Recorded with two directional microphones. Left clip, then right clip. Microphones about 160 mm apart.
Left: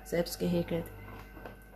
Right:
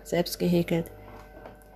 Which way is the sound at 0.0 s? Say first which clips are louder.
Right 5 dB; 35° right (ahead or behind).